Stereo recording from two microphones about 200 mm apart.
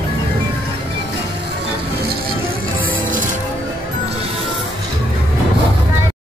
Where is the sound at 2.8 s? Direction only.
45° right (ahead or behind).